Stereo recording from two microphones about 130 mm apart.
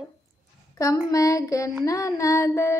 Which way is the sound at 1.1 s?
25° left (ahead or behind).